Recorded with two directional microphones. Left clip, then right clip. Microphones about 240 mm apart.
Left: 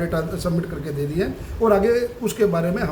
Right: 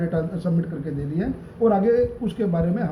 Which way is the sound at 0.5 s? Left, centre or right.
Left.